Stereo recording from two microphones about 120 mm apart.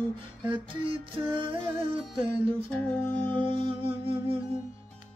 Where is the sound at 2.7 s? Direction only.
15° left (ahead or behind).